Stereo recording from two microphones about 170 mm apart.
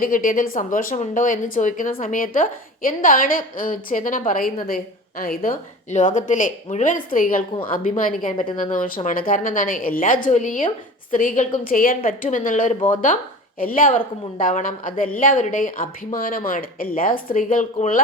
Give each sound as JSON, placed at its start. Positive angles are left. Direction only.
{"t": 0.0, "sound": "speech", "side_deg": 55}